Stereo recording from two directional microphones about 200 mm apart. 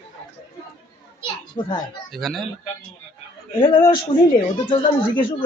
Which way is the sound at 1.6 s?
25° left (ahead or behind).